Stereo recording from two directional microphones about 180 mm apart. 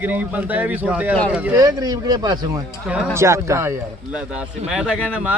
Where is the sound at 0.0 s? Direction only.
10° right (ahead or behind).